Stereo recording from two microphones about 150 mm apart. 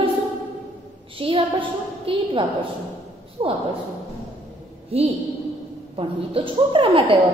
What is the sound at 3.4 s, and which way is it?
Speech, 35° right (ahead or behind).